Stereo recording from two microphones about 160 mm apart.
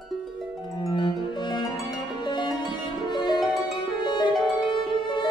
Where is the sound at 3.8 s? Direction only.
30° left (ahead or behind).